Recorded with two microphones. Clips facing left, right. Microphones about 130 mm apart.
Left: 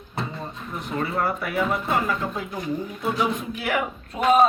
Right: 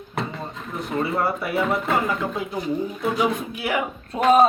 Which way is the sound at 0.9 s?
20° right (ahead or behind).